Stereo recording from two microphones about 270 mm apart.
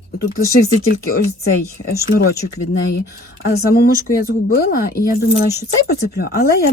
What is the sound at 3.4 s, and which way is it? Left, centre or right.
A woman's voice, left.